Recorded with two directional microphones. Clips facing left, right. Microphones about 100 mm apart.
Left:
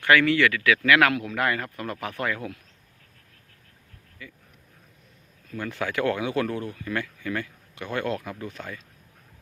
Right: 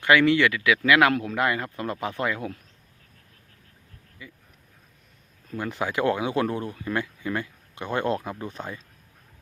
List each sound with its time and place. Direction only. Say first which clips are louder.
0.0 s speech: right 1 dB; 20° right (ahead or behind)
4.2 s speech: left 1 dB; 20° right (ahead or behind)
5.5 s speech: right 1 dB; 20° right (ahead or behind)